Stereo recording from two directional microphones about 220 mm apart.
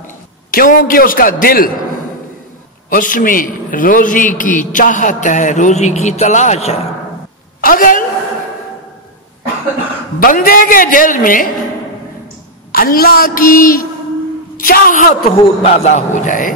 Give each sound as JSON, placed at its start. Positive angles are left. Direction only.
{"t": 0.0, "sound": "a man's voice", "side_deg": 40}
{"t": 2.9, "sound": "a man's voice", "side_deg": 40}
{"t": 10.2, "sound": "a man's voice", "side_deg": 40}
{"t": 12.7, "sound": "a man's voice", "side_deg": 40}